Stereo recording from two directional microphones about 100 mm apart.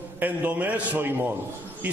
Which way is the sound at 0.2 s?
15° right (ahead or behind).